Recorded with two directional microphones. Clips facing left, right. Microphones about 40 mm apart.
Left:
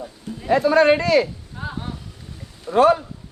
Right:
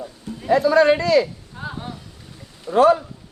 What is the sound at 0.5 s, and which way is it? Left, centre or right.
Speech, left.